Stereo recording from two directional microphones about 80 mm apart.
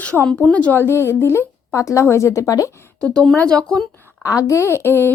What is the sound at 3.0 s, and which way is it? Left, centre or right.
Speech, centre.